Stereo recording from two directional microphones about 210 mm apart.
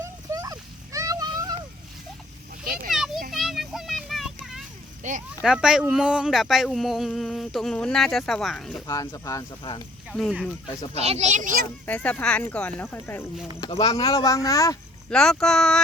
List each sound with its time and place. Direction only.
0.0 s a sound: 15° right (ahead or behind)
2.9 s children playing: centre (ahead or behind)
3.3 s child singing: centre (ahead or behind)
5.0 s a child's voice: 35° right (ahead or behind)
5.4 s speech: 5° right (ahead or behind)
8.9 s speech: 15° left (ahead or behind)
10.1 s speech: centre (ahead or behind)
10.9 s a child's voice: 30° right (ahead or behind)
11.9 s speech: 5° left (ahead or behind)
13.6 s speech: 25° left (ahead or behind)
15.1 s speech: 5° left (ahead or behind)